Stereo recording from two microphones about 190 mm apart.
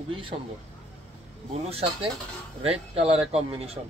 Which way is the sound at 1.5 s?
30° right (ahead or behind).